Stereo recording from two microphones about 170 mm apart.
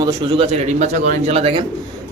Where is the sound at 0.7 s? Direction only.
45° right (ahead or behind).